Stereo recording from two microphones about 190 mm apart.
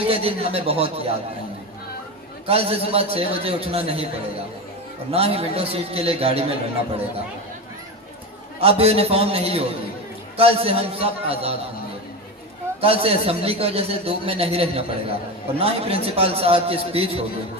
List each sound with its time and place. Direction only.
0.1 s a man's voice: 30° right (ahead or behind)
2.5 s a man's voice: 30° right (ahead or behind)
5.1 s a man's voice: 30° right (ahead or behind)
8.6 s a man's voice: 30° right (ahead or behind)
12.8 s a man's voice: 30° right (ahead or behind)